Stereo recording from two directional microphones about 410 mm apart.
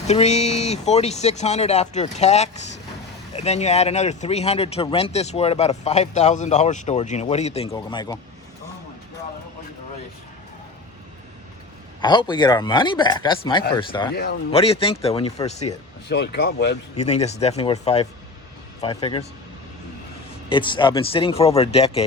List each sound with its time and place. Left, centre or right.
0.1 s speech: centre
11.9 s speech: centre
20.5 s speech: centre